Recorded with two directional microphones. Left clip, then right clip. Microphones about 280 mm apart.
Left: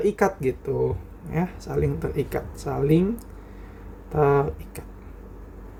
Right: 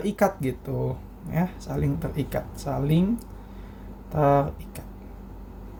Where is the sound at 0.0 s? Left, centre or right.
Centre.